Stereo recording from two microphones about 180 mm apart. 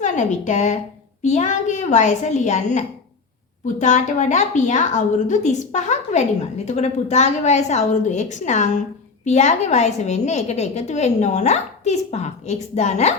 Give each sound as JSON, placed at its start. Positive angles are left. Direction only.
{"t": 0.0, "sound": "a woman's voice", "side_deg": 40}